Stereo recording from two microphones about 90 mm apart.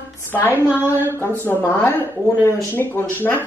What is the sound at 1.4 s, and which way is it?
A woman's voice, 25° left (ahead or behind).